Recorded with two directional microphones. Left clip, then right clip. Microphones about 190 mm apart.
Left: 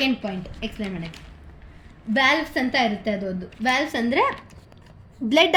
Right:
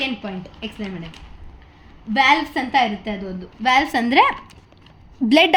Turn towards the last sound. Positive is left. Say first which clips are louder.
# right 3 dB
turn(degrees=-40)  # may be behind; listen again after turning